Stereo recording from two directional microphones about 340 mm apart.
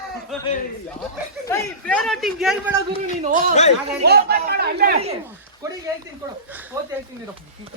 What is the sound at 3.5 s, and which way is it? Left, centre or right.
Speech, centre.